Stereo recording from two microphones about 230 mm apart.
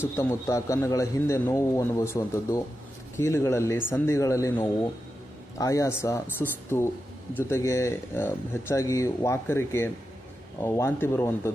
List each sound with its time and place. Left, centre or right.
0.2 s speech: centre